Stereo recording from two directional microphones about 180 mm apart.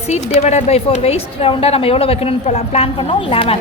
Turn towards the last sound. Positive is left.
turn(degrees=30)  # may be behind; listen again after turning